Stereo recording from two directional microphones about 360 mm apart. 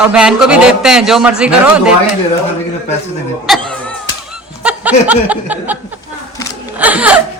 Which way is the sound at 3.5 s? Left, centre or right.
Centre.